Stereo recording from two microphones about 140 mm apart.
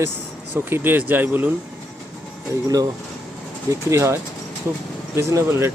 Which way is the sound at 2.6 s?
25° right (ahead or behind).